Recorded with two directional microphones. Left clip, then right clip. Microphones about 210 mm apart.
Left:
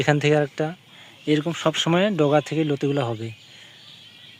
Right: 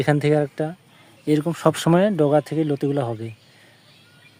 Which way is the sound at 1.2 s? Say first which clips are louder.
Right 2 dB; 20° right (ahead or behind).